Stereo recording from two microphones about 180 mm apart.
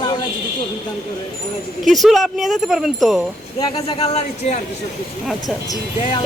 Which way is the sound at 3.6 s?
30° left (ahead or behind).